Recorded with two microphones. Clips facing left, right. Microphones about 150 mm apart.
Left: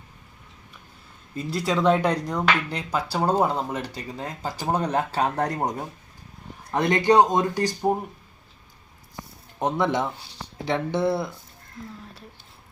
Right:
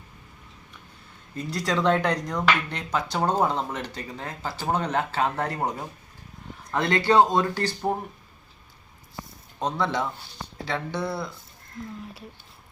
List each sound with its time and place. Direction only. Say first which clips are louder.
1.4 s speech: left 2 dB; 5° left (ahead or behind)
5.1 s speech: left 2 dB; 40° left (ahead or behind)
6.7 s speech: left 2 dB; 20° left (ahead or behind)
9.6 s speech: left 3 dB; 20° left (ahead or behind)